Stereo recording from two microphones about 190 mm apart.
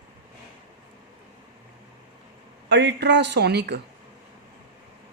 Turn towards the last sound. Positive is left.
turn(degrees=-60)  # may be behind; listen again after turning